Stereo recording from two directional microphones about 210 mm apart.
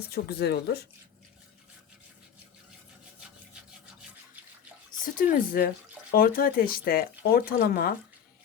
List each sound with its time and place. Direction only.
0.1 s speech: 50° left (ahead or behind)
5.0 s speech: 40° left (ahead or behind)